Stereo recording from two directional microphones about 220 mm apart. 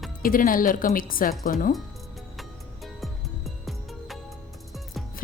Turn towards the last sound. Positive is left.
turn(degrees=0)  # may be behind; listen again after turning